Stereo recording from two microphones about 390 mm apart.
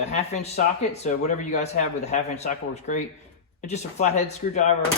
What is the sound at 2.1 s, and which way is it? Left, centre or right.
Speech, centre.